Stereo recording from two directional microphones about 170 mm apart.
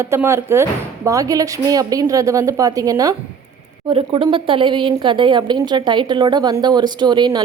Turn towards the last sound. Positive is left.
turn(degrees=-25)  # may be behind; listen again after turning